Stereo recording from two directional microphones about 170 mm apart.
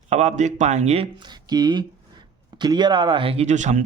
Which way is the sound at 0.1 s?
40° right (ahead or behind).